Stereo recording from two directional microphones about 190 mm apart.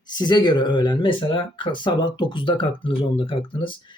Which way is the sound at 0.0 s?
20° left (ahead or behind).